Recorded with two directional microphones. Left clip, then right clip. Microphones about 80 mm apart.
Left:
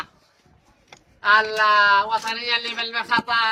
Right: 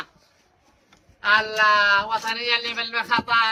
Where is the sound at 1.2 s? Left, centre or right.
Right.